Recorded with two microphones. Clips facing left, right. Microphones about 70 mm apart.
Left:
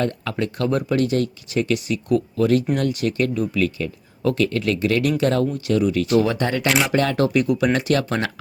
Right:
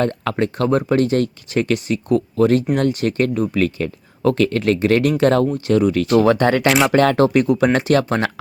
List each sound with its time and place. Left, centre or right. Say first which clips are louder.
0.0 s speech: right 4 dB; right
5.5 s speech: right 4 dB; right
5.8 s speech: right 3 dB; right
6.7 s speech: right 3 dB; centre
6.9 s speech: right 6 dB; right
7.4 s speech: right 3 dB; right